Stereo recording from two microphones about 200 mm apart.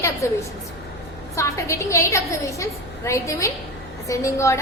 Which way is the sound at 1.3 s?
15° left (ahead or behind).